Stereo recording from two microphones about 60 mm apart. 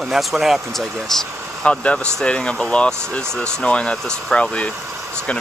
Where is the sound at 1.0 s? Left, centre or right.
Centre.